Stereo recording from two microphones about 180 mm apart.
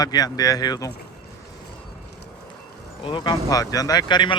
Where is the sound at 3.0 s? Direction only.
25° left (ahead or behind).